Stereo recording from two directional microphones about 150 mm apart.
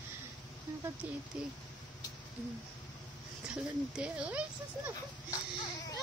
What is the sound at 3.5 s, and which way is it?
Speech, 10° right (ahead or behind).